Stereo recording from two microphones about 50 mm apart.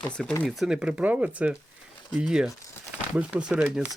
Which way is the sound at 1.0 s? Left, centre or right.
Right.